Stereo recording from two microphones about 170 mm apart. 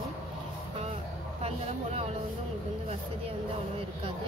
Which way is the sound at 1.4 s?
35° right (ahead or behind).